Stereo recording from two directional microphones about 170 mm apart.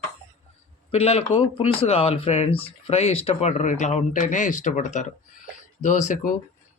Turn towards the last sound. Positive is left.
turn(degrees=50)  # may be behind; listen again after turning